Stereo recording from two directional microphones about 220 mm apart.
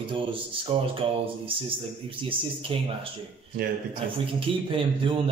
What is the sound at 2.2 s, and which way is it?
Speech, 25° right (ahead or behind).